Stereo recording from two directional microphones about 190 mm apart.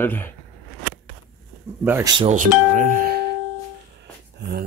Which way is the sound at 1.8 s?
10° right (ahead or behind).